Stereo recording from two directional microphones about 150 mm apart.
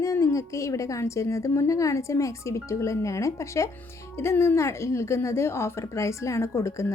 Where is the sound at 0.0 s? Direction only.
20° left (ahead or behind).